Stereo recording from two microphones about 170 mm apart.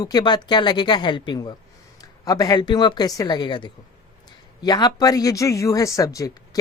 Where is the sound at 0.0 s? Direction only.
25° left (ahead or behind).